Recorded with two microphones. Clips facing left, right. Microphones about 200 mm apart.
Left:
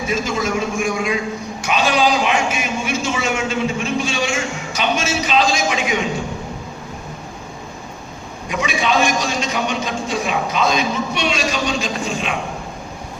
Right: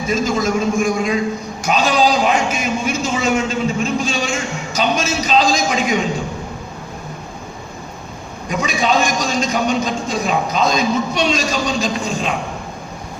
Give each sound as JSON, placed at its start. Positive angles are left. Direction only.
{"t": 0.1, "sound": "a man's voice", "side_deg": -40}
{"t": 8.4, "sound": "a man's voice", "side_deg": -40}